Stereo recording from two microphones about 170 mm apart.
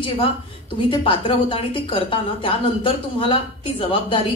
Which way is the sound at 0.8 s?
30° left (ahead or behind).